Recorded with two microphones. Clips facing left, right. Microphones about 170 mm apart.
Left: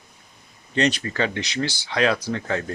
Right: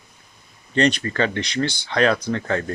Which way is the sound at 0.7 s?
10° left (ahead or behind).